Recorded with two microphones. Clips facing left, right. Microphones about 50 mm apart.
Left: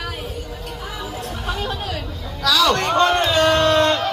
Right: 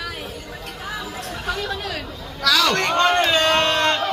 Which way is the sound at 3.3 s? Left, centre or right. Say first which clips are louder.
Left 2 dB; right.